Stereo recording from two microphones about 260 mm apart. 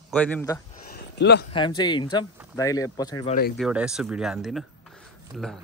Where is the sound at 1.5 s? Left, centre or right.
Centre.